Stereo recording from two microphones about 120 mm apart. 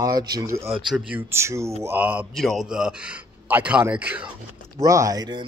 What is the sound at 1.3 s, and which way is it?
Speech, 25° right (ahead or behind).